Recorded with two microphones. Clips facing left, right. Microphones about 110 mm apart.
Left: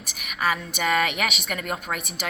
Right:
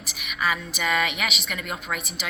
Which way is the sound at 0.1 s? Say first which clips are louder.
Left 1 dB; 45° left (ahead or behind).